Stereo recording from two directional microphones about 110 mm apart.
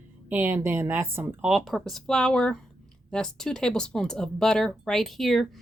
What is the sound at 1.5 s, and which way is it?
Speech, centre (ahead or behind).